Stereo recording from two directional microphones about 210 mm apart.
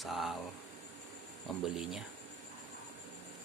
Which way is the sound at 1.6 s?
Centre (ahead or behind).